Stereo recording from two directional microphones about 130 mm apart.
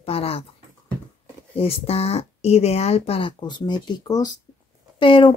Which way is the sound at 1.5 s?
50° left (ahead or behind).